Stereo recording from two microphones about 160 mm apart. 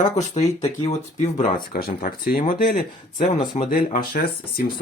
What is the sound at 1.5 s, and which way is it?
Speech, 65° left (ahead or behind).